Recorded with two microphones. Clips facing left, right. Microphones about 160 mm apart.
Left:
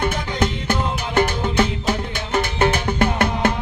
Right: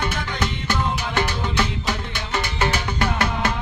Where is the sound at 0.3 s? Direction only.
50° left (ahead or behind).